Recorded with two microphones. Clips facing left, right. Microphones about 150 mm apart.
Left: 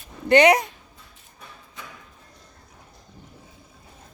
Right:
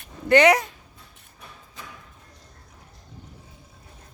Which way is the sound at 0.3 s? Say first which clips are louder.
Left 1 dB; 20° left (ahead or behind).